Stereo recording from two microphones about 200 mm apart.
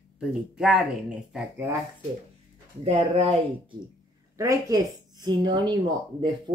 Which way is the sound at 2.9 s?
30° right (ahead or behind).